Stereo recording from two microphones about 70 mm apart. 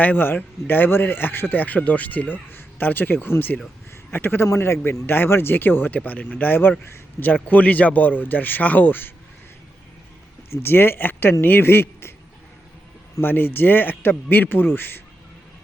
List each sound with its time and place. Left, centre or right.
0.0 s speech: left
10.5 s speech: left
13.2 s speech: left